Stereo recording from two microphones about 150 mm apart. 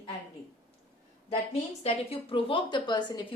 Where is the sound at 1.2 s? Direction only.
40° left (ahead or behind).